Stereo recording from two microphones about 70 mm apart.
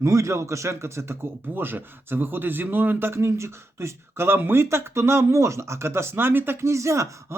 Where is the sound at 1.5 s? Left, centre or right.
Right.